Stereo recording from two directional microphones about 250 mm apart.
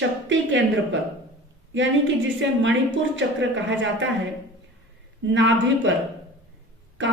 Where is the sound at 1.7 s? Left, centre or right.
Right.